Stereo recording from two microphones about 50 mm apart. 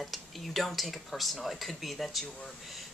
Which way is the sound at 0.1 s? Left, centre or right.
Centre.